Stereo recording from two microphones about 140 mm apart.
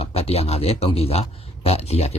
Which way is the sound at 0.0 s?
45° left (ahead or behind).